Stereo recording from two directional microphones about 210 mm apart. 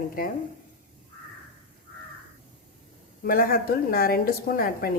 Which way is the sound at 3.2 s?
45° left (ahead or behind).